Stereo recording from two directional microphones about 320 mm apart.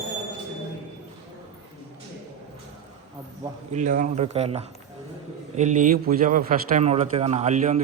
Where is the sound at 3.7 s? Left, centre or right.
Right.